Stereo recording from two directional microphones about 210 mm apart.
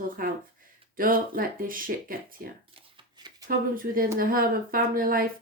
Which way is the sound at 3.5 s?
45° right (ahead or behind).